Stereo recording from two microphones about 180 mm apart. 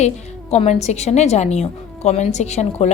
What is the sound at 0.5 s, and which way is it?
A woman's voice, 35° left (ahead or behind).